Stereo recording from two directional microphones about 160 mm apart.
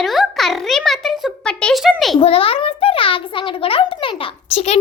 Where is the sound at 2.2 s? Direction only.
35° left (ahead or behind).